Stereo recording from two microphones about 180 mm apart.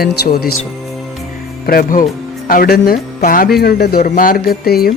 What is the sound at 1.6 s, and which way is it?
Speech, 55° left (ahead or behind).